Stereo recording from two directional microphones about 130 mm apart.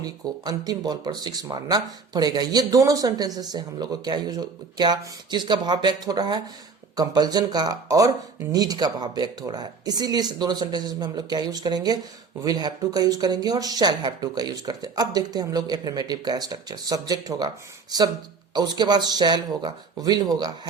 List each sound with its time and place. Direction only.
0.0 s speech: 30° right (ahead or behind)
18.5 s speech: 35° right (ahead or behind)